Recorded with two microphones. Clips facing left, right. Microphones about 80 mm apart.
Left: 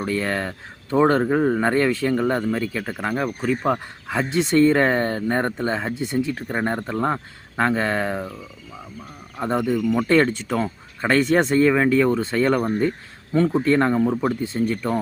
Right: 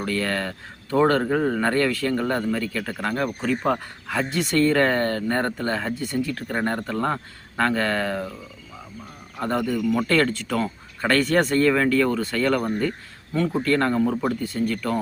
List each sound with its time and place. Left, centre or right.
0.0 s speech: left
9.4 s speech: centre
13.3 s speech: left
13.6 s speech: centre